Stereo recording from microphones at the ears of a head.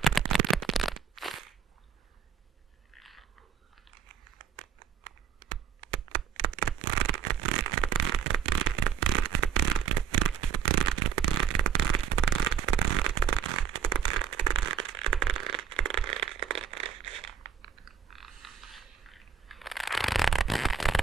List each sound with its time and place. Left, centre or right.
0.2 s shuffling cards: right
3.9 s computer keyboard: right
19.0 s a sound: centre